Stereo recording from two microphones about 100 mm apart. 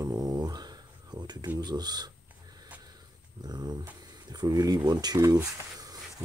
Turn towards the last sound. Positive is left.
turn(degrees=-40)  # may be behind; listen again after turning